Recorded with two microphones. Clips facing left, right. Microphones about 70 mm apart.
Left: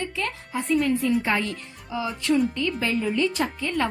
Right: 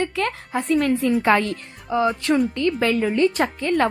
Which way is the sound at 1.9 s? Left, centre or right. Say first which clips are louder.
Right 4 dB; right.